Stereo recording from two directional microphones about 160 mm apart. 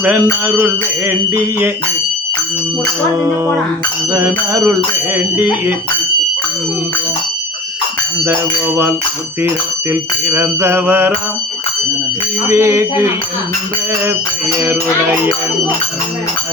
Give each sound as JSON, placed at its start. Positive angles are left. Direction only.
{"t": 0.4, "sound": "music", "side_deg": -10}
{"t": 4.1, "sound": "music", "side_deg": -20}
{"t": 9.9, "sound": "music", "side_deg": -15}
{"t": 12.5, "sound": "music", "side_deg": -15}
{"t": 14.6, "sound": "music", "side_deg": -15}